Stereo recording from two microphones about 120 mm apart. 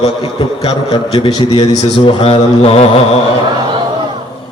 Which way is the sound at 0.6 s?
55° left (ahead or behind).